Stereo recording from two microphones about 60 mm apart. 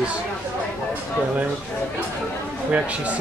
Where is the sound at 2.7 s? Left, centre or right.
Right.